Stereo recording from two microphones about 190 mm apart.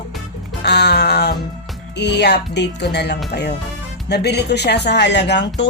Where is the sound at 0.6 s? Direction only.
60° left (ahead or behind).